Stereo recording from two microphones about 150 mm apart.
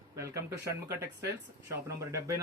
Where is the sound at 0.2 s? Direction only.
20° right (ahead or behind).